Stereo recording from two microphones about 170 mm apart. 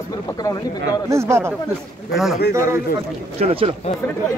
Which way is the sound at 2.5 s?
15° right (ahead or behind).